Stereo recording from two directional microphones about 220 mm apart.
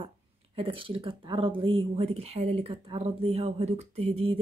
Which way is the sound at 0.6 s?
25° right (ahead or behind).